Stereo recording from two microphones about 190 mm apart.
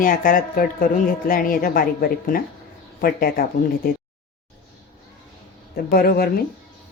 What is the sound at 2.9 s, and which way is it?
Speech, 50° left (ahead or behind).